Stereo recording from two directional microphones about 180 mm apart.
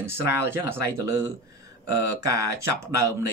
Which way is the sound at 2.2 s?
15° right (ahead or behind).